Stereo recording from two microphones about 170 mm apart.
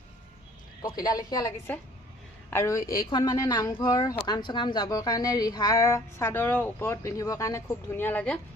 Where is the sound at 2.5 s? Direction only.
15° left (ahead or behind).